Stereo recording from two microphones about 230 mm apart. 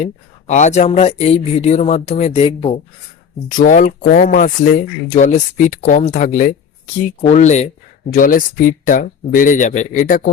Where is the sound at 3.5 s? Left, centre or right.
Left.